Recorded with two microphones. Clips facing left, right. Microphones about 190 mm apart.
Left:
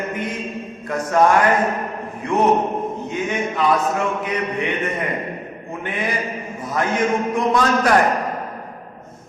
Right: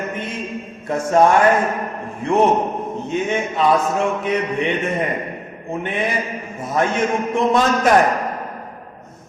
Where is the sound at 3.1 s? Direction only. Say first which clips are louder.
Right 4 dB; 25° right (ahead or behind).